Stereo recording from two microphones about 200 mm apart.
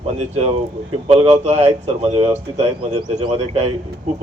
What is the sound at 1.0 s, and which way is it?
Speech, 30° right (ahead or behind).